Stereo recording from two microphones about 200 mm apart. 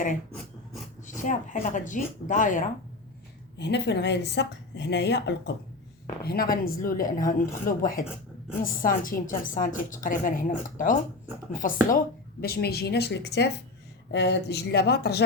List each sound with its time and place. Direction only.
1.2 s speech: 40° left (ahead or behind)
3.6 s a woman's voice: 60° left (ahead or behind)